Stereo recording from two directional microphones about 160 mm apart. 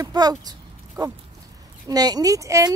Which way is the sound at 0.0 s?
25° right (ahead or behind).